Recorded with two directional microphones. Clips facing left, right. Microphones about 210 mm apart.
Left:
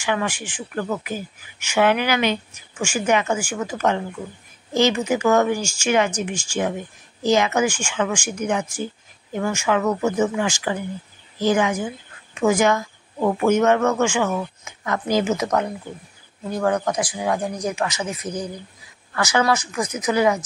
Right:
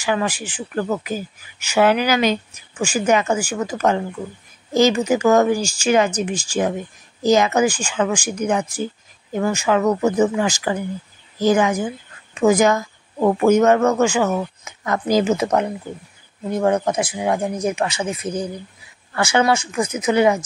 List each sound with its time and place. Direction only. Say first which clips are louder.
0.0 s speech: right 2 dB; 35° right (ahead or behind)